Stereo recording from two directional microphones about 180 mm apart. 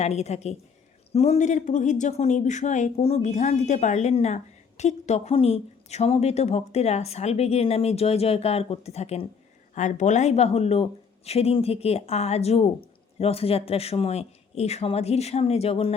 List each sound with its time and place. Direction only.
0.0 s a woman's voice: 35° left (ahead or behind)